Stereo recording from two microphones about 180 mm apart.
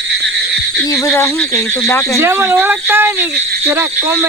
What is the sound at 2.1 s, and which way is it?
Speech, 15° right (ahead or behind).